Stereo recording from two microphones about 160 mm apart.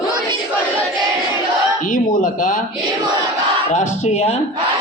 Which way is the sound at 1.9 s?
55° left (ahead or behind).